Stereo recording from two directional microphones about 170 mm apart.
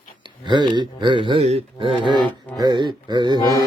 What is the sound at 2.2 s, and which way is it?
Music, 5° left (ahead or behind).